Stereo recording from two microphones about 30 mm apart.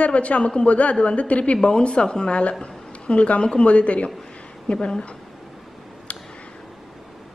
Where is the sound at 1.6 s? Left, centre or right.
Left.